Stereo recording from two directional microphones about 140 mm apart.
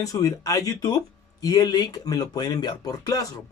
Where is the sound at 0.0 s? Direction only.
25° left (ahead or behind).